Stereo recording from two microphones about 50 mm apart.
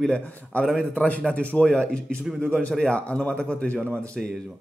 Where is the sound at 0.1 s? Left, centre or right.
Left.